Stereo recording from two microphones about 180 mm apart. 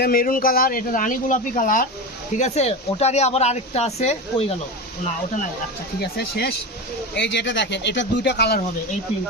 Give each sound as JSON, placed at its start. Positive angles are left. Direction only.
{"t": 0.0, "sound": "speech", "side_deg": 55}
{"t": 2.4, "sound": "speech", "side_deg": 35}
{"t": 6.0, "sound": "speech", "side_deg": 60}
{"t": 7.2, "sound": "speech", "side_deg": 80}